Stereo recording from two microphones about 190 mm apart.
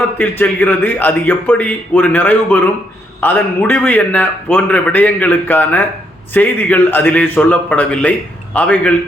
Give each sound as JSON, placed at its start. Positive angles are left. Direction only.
{"t": 0.2, "sound": "a man's voice", "side_deg": 10}